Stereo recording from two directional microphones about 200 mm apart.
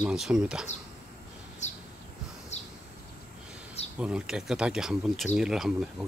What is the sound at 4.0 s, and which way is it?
Speech, 5° right (ahead or behind).